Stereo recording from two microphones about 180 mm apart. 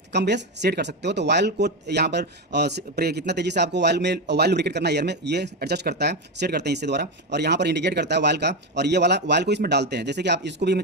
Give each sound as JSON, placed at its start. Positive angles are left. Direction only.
{"t": 0.1, "sound": "speech", "side_deg": -70}